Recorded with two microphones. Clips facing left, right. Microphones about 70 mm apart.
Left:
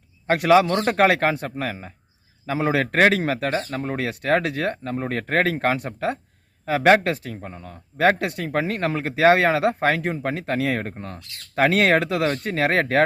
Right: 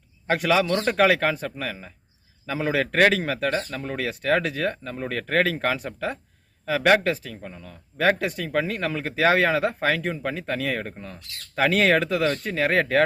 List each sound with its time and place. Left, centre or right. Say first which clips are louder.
0.3 s speech: left 5 dB; left
3.3 s speech: left 1 dB; left
12.2 s speech: left 1 dB; left